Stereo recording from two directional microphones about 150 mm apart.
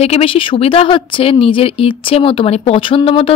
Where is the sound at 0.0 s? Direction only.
40° left (ahead or behind).